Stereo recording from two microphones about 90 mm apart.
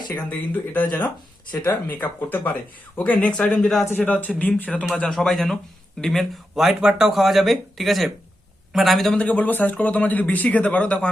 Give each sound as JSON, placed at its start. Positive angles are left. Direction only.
{"t": 0.3, "sound": "speech", "side_deg": 20}
{"t": 1.5, "sound": "speech", "side_deg": 50}
{"t": 2.0, "sound": "speech", "side_deg": 20}
{"t": 3.8, "sound": "speech", "side_deg": 20}